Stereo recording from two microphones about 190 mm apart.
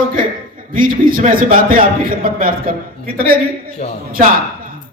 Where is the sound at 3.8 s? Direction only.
35° left (ahead or behind).